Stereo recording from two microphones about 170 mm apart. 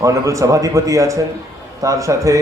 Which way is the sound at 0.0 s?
20° right (ahead or behind).